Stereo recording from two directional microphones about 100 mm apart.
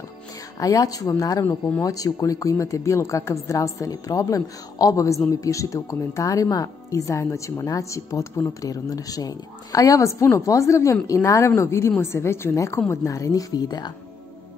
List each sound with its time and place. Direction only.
0.6 s a woman's voice: 35° left (ahead or behind)